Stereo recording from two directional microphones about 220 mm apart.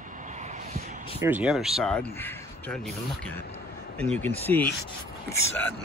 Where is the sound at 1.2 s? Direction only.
5° right (ahead or behind).